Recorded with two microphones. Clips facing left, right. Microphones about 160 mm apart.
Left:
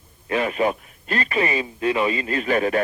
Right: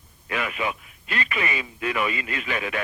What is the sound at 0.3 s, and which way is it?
A man's voice, 35° left (ahead or behind).